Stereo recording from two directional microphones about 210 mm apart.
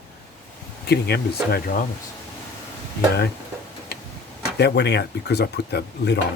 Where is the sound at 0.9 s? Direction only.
50° left (ahead or behind).